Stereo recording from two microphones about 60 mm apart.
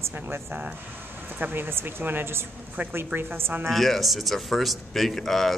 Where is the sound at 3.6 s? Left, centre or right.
Centre.